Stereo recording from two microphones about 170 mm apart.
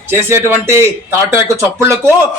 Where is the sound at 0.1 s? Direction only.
15° right (ahead or behind).